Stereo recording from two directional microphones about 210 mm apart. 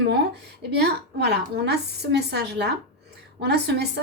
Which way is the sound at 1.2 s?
50° right (ahead or behind).